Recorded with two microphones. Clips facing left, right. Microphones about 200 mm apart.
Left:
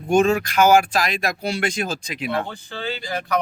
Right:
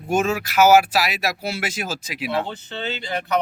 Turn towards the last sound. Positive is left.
turn(degrees=-20)  # may be behind; listen again after turning